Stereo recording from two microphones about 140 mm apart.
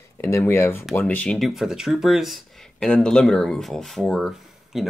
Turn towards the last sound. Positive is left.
turn(degrees=0)  # may be behind; listen again after turning